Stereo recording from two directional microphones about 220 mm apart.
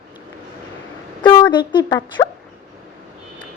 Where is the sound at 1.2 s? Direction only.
20° left (ahead or behind).